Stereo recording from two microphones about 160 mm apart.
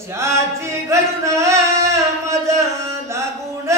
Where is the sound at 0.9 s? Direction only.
20° right (ahead or behind).